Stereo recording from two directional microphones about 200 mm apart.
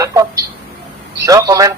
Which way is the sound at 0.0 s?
15° right (ahead or behind).